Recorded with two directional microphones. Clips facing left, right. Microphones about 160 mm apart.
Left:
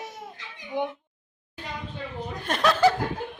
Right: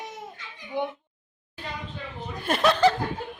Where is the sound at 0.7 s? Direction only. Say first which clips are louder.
Left 1 dB; 20° left (ahead or behind).